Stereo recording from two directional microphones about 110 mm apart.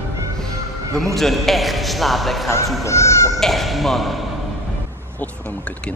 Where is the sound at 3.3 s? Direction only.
Centre (ahead or behind).